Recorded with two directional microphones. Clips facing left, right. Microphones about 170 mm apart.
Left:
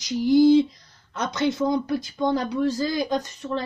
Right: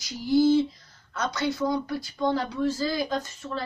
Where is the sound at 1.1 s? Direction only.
20° left (ahead or behind).